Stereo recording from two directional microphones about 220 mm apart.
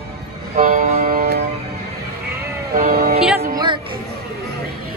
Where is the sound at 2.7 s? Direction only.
40° right (ahead or behind).